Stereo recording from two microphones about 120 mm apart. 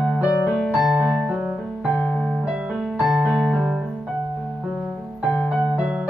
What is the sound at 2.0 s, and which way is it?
Music, 15° left (ahead or behind).